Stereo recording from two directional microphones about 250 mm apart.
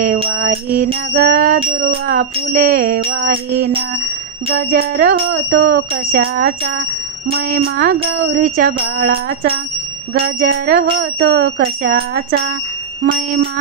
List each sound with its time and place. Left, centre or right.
0.3 s speech: right